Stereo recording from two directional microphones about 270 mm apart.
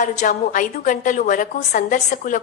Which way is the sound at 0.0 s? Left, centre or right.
Left.